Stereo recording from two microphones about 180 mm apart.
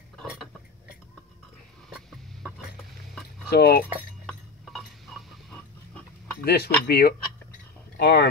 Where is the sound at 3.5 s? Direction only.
60° left (ahead or behind).